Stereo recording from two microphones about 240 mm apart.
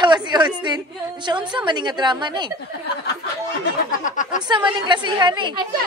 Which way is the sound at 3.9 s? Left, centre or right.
Left.